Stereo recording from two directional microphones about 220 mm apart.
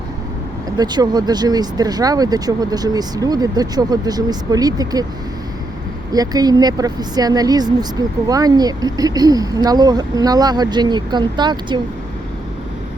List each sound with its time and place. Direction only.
0.8 s speech: 20° right (ahead or behind)
6.1 s speech: 15° right (ahead or behind)